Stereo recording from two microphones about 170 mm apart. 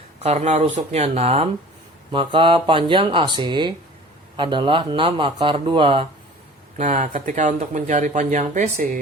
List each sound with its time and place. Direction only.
0.2 s speech: 40° right (ahead or behind)
6.7 s speech: 45° right (ahead or behind)